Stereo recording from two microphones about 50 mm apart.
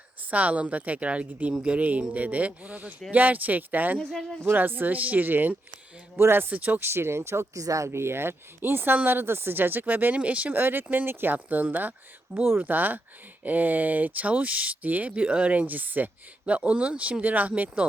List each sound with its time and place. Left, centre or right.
0.3 s speech: right
4.1 s speech: centre
4.5 s speech: right
6.1 s speech: right
6.5 s speech: right
6.7 s speech: right